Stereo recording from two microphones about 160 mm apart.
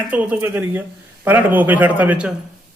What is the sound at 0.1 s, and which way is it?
Speech, 10° right (ahead or behind).